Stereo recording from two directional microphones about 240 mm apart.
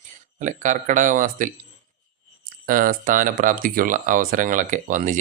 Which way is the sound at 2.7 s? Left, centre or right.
Right.